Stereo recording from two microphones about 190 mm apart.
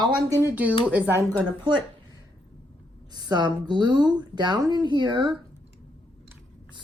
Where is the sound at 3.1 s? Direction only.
20° right (ahead or behind).